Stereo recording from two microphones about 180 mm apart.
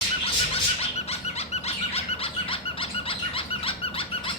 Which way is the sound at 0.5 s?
35° left (ahead or behind).